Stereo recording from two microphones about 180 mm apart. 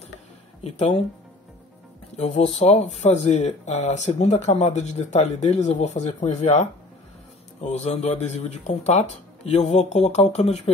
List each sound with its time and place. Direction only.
0.7 s speech: 40° left (ahead or behind)
2.1 s speech: 35° left (ahead or behind)
7.6 s speech: 40° left (ahead or behind)